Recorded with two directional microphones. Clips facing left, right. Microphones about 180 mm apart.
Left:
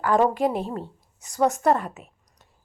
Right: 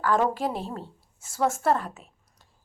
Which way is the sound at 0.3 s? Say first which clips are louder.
Left 5 dB; centre (ahead or behind).